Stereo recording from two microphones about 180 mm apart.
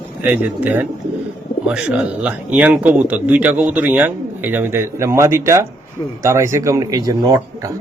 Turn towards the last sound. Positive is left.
turn(degrees=-20)  # may be behind; listen again after turning